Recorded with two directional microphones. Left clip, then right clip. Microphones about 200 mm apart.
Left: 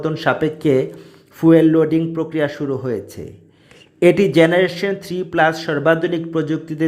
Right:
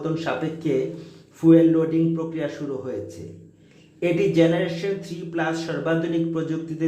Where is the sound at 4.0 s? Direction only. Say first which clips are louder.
Left 7 dB; 40° left (ahead or behind).